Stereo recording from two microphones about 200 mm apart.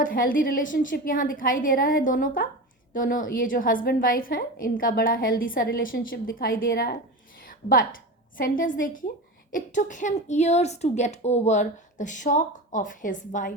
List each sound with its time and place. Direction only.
0.0 s a woman's voice: 45° left (ahead or behind)
7.4 s a sound: 45° left (ahead or behind)
8.4 s a woman's voice: 45° left (ahead or behind)